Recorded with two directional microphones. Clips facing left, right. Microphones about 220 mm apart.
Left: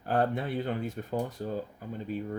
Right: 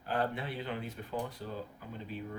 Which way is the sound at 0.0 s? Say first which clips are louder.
Left 6 dB; 45° left (ahead or behind).